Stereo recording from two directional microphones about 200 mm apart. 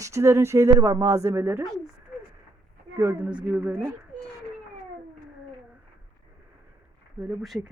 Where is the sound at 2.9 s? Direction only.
10° right (ahead or behind).